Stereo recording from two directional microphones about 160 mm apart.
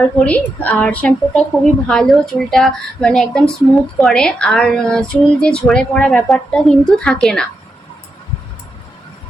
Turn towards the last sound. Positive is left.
turn(degrees=5)  # may be behind; listen again after turning